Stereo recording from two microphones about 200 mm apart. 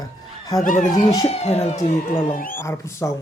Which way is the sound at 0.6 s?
40° left (ahead or behind).